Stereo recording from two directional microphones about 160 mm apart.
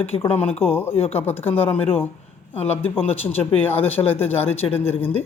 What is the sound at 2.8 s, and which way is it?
Speech, 35° left (ahead or behind).